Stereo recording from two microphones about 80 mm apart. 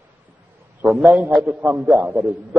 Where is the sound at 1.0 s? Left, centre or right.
Centre.